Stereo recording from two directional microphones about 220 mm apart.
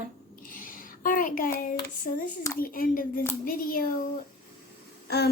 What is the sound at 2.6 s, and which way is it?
A woman's voice, 40° left (ahead or behind).